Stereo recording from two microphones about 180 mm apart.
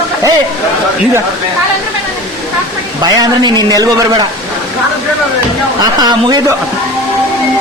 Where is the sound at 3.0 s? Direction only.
20° right (ahead or behind).